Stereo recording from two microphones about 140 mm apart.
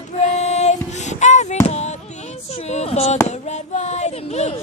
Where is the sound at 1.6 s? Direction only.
50° left (ahead or behind).